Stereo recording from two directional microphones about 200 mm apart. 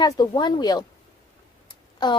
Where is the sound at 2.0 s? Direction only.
20° left (ahead or behind).